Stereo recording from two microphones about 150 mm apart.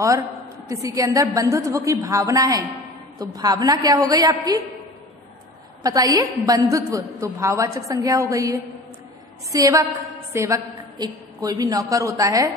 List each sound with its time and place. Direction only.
0.7 s a woman's voice: 20° right (ahead or behind)
5.8 s a woman's voice: 25° right (ahead or behind)